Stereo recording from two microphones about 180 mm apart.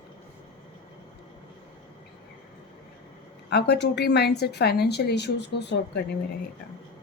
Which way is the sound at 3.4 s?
70° left (ahead or behind).